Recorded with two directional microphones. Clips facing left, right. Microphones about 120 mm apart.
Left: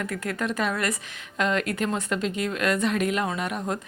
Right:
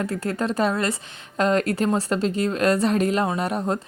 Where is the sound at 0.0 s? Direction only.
30° right (ahead or behind).